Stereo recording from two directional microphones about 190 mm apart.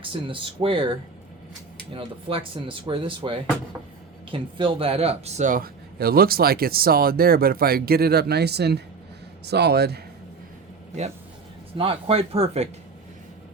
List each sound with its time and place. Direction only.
0.0 s a man's voice: 25° right (ahead or behind); by 10.0 s 55° right (ahead or behind)
11.8 s speech: 30° right (ahead or behind)